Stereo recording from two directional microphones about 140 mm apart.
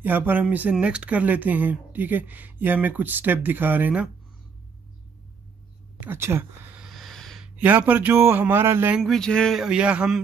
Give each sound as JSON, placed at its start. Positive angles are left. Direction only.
{"t": 0.0, "sound": "speech", "side_deg": -10}
{"t": 5.9, "sound": "speech", "side_deg": -15}
{"t": 6.9, "sound": "speech", "side_deg": 0}
{"t": 9.0, "sound": "a sound", "side_deg": 5}